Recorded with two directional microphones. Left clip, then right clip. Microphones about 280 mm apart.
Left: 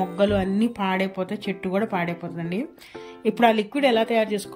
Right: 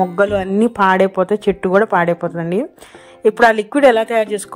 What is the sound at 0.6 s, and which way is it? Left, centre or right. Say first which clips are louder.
A woman's voice: right 12 dB; right.